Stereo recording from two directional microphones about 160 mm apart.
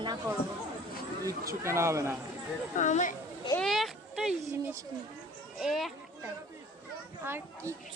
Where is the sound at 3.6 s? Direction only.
Centre (ahead or behind).